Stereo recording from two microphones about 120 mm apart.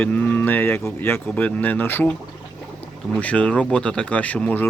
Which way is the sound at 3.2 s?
10° left (ahead or behind).